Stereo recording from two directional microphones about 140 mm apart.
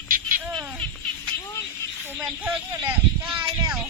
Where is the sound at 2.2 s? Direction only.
5° right (ahead or behind).